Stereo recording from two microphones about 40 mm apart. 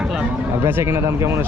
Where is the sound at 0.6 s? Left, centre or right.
Right.